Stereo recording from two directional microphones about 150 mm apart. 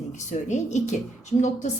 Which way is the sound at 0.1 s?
55° left (ahead or behind).